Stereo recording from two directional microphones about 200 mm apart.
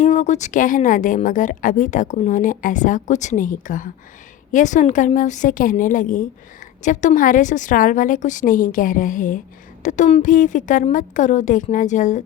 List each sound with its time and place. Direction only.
0.0 s a woman's voice: 35° left (ahead or behind)